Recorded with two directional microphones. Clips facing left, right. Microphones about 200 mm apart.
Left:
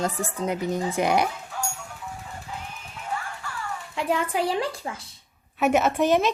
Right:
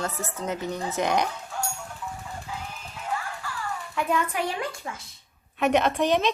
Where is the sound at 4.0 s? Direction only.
25° left (ahead or behind).